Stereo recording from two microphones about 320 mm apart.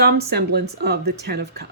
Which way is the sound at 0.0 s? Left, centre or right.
Right.